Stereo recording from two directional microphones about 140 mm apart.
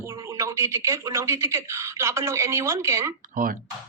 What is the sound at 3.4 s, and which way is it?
Speech, 85° right.